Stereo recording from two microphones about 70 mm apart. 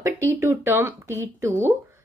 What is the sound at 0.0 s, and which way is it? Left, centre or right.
A woman's voice, right.